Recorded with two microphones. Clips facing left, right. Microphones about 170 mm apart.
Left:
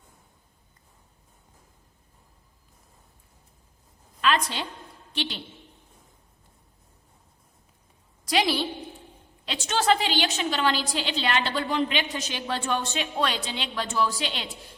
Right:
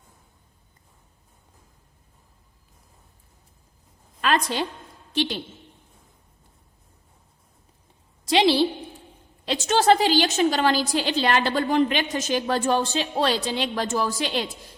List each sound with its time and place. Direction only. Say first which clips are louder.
4.2 s a sound: right 2 dB; 45° right (ahead or behind)
5.1 s a woman's voice: right 7 dB; 45° right (ahead or behind)
8.2 s a woman's voice: right 6 dB; 25° right (ahead or behind)
9.5 s a woman's voice: right 5 dB; 40° right (ahead or behind)